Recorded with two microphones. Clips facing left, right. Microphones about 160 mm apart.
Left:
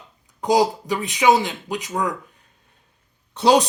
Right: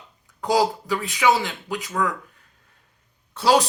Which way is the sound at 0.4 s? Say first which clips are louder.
Left 2 dB; 20° left (ahead or behind).